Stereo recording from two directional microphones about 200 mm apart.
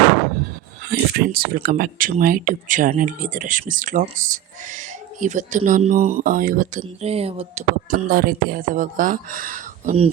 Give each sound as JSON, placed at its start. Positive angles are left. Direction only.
{"t": 0.9, "sound": "speech", "side_deg": -50}
{"t": 7.1, "sound": "speech", "side_deg": -30}